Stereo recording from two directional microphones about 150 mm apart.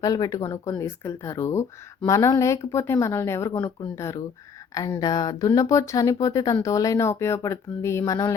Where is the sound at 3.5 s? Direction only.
30° left (ahead or behind).